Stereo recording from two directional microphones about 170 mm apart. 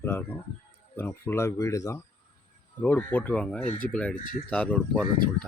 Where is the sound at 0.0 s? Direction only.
15° left (ahead or behind).